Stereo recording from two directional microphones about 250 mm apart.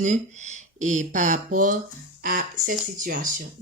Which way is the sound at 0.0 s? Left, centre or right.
Right.